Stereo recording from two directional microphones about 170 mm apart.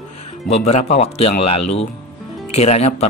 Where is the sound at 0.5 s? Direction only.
40° left (ahead or behind).